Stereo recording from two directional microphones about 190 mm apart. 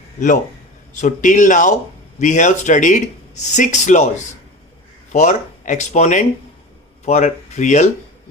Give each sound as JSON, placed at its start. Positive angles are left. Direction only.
{"t": 0.9, "sound": "speech", "side_deg": 40}
{"t": 5.1, "sound": "speech", "side_deg": 40}